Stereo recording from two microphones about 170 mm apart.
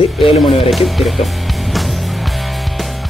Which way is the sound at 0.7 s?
Centre (ahead or behind).